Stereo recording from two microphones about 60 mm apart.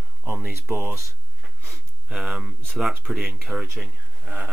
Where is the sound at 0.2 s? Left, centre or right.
Right.